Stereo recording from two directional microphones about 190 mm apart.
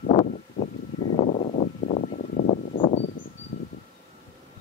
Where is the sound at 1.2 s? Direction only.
40° left (ahead or behind).